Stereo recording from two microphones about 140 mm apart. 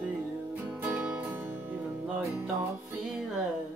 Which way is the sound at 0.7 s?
10° right (ahead or behind).